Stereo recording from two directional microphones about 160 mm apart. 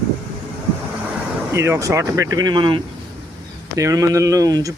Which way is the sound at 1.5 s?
15° right (ahead or behind).